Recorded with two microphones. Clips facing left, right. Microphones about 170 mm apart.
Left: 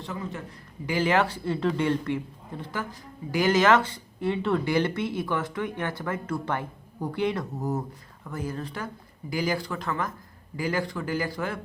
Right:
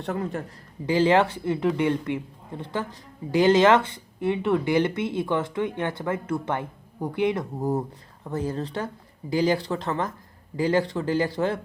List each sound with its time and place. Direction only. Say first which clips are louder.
0.0 s speech: right 6 dB; 55° right (ahead or behind)
0.9 s speech: right 4 dB; 25° right (ahead or behind)